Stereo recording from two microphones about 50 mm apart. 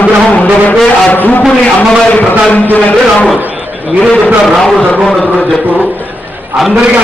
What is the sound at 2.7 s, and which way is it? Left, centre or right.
Speech, left.